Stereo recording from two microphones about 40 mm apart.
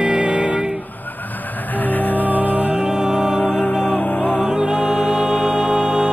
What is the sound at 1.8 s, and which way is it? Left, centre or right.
Music, left.